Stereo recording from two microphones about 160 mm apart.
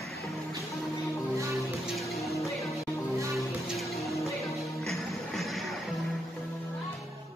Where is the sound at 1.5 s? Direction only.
Centre (ahead or behind).